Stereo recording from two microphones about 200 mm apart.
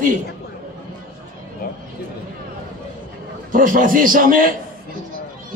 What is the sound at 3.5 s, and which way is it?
A man's voice, 40° right (ahead or behind).